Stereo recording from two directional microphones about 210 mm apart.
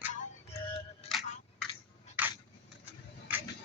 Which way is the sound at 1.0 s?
30° left (ahead or behind).